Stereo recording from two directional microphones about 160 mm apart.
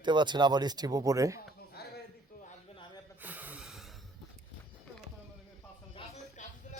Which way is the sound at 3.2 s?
10° right (ahead or behind).